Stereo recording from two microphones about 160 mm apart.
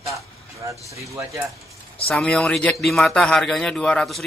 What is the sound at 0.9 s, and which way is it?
Speech, 20° right (ahead or behind).